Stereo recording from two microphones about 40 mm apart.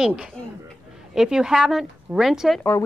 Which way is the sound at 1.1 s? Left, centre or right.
Centre.